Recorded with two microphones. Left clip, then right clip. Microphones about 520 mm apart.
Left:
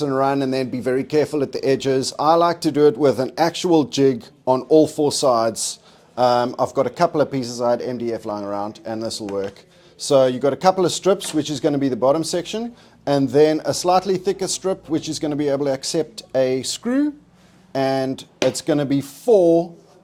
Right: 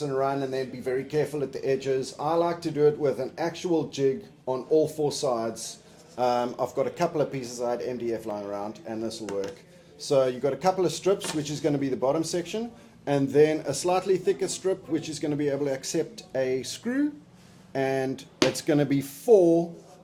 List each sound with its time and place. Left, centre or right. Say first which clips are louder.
0.0 s speech: left 8 dB; left